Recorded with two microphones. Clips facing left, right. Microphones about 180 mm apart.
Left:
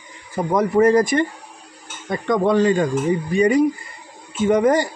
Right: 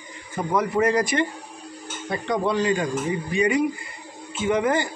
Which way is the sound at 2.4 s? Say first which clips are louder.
Left 7 dB; 45° left (ahead or behind).